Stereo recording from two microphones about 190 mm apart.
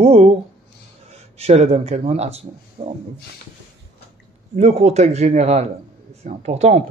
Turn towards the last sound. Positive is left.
turn(degrees=-35)  # may be behind; listen again after turning